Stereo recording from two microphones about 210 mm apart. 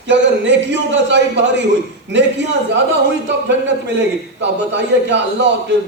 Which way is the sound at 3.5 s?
55° right (ahead or behind).